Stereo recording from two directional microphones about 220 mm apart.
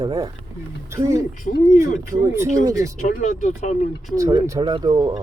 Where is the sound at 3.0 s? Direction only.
40° left (ahead or behind).